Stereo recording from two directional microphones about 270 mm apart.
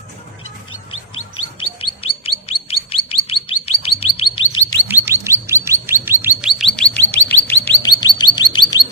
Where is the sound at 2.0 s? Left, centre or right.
Left.